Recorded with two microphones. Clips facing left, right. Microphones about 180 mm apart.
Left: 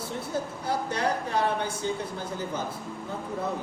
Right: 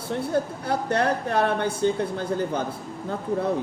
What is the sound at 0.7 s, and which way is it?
Speech, 55° right (ahead or behind).